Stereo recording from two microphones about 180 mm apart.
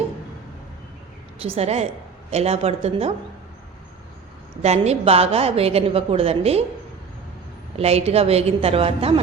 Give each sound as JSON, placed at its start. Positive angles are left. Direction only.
{"t": 1.4, "sound": "a woman's voice", "side_deg": -35}
{"t": 4.6, "sound": "a woman's voice", "side_deg": -35}
{"t": 7.8, "sound": "a woman's voice", "side_deg": -35}